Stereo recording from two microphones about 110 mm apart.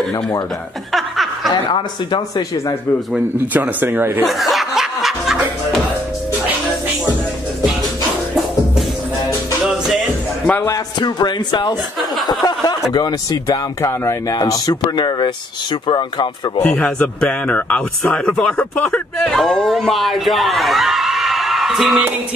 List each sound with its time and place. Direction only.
0.9 s snicker: centre (ahead or behind)
1.5 s speech: 45° left (ahead or behind)
3.5 s speech: 15° right (ahead or behind)
4.2 s snicker: centre (ahead or behind)
9.8 s music: centre (ahead or behind)
10.7 s speech: 40° left (ahead or behind)
16.6 s a man's voice: 15° left (ahead or behind); by 22.0 s 5° right (ahead or behind)